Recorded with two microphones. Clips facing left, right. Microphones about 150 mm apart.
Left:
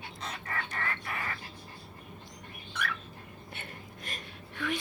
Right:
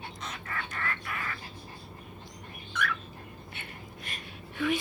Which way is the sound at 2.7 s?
35° left (ahead or behind).